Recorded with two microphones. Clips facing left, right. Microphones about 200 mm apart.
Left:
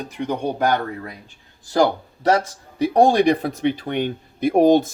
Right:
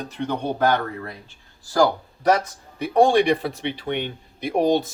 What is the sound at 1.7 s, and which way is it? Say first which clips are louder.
Speech: left 1 dB; 25° left (ahead or behind).